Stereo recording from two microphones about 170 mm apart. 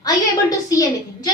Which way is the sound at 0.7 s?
20° left (ahead or behind).